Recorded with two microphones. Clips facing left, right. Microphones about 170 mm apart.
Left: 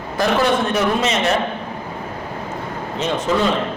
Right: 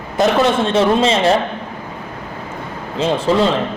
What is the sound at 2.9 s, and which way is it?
Speech, 30° right (ahead or behind).